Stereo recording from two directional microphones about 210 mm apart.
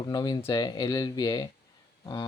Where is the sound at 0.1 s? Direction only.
20° left (ahead or behind).